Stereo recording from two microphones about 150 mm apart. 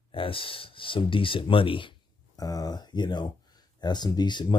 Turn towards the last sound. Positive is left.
turn(degrees=30)  # may be behind; listen again after turning